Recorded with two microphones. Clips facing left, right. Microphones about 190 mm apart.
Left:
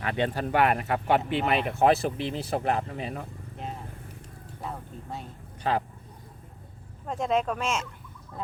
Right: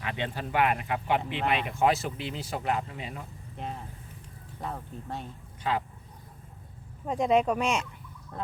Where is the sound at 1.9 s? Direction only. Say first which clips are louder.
Left 5 dB; 60° left (ahead or behind).